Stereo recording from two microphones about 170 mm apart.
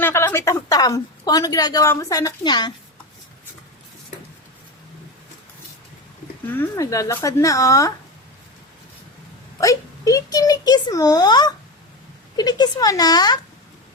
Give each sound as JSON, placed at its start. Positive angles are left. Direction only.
{"t": 0.0, "sound": "a woman's voice", "side_deg": 15}
{"t": 6.6, "sound": "speech", "side_deg": 20}
{"t": 9.6, "sound": "a woman's voice", "side_deg": 20}